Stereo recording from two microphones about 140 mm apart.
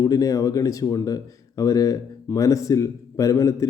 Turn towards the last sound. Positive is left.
turn(degrees=25)  # may be behind; listen again after turning